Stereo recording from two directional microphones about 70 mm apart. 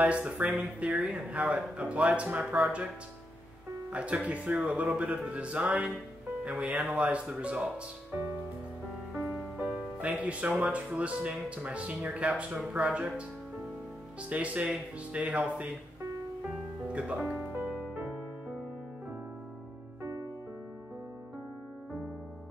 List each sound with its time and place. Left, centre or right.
0.0 s speech: right
3.9 s speech: centre
9.6 s music: centre
10.6 s speech: centre
14.3 s speech: right
16.9 s speech: centre
17.5 s music: right